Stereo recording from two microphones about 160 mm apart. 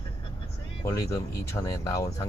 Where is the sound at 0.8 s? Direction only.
20° left (ahead or behind).